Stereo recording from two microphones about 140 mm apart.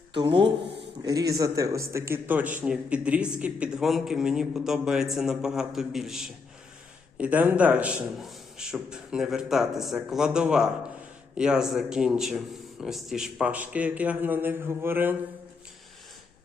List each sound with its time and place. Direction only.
0.1 s speech: 35° right (ahead or behind)
1.0 s a man's voice: 25° right (ahead or behind)